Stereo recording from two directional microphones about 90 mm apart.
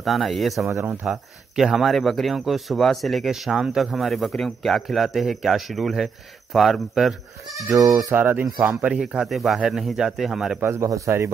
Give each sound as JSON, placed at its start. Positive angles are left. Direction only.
{"t": 0.0, "sound": "speech", "side_deg": 0}
{"t": 0.7, "sound": "speech", "side_deg": -30}
{"t": 1.0, "sound": "speech", "side_deg": -5}
{"t": 7.7, "sound": "speech", "side_deg": -40}
{"t": 8.1, "sound": "speech", "side_deg": -20}
{"t": 9.0, "sound": "speech", "side_deg": -5}
{"t": 10.6, "sound": "speech", "side_deg": -30}